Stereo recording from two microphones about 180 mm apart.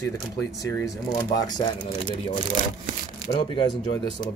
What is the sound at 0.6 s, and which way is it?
Speech, 20° left (ahead or behind).